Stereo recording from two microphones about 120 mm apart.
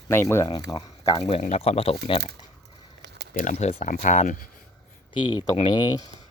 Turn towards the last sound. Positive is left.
turn(degrees=35)  # may be behind; listen again after turning